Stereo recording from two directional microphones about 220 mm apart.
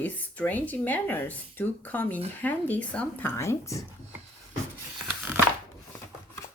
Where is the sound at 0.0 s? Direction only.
5° left (ahead or behind).